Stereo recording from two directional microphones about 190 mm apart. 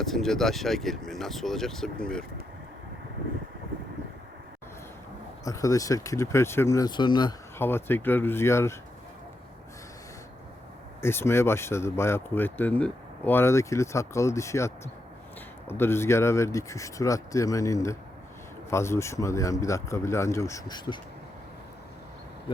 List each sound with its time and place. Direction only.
0.0 s speech: centre (ahead or behind)
5.5 s speech: 15° left (ahead or behind)
7.6 s speech: 10° left (ahead or behind)
11.0 s speech: 15° left (ahead or behind)